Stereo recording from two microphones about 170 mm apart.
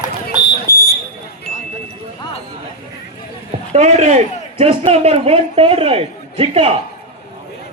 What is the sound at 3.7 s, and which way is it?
A man's voice, 40° right (ahead or behind).